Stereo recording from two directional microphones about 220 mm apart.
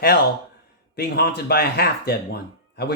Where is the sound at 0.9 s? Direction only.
45° left (ahead or behind).